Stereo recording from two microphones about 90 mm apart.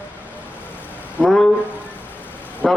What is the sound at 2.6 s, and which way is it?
Speech, 10° left (ahead or behind).